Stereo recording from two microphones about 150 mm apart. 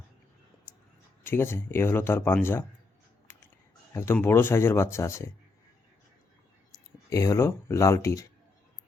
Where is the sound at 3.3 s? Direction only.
15° left (ahead or behind).